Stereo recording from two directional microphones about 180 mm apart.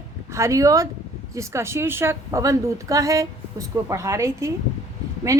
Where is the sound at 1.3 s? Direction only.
15° right (ahead or behind).